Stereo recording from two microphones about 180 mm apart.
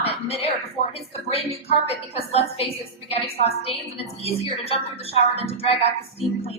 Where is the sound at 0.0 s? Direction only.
35° left (ahead or behind).